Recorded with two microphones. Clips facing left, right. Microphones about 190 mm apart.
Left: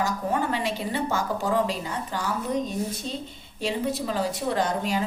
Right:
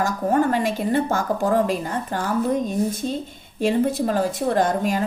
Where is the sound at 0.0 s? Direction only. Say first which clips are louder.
Right 6 dB; 50° right (ahead or behind).